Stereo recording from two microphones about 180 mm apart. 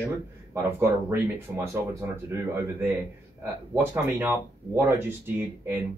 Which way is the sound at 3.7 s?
10° right (ahead or behind).